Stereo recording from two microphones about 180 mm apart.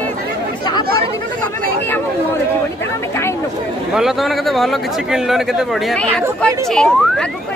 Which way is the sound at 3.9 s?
Centre (ahead or behind).